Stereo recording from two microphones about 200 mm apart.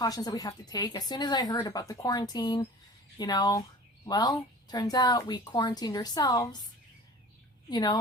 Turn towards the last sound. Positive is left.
turn(degrees=20)  # may be behind; listen again after turning